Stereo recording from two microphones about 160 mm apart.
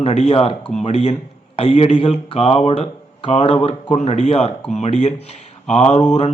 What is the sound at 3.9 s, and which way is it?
Mantra, 45° left (ahead or behind).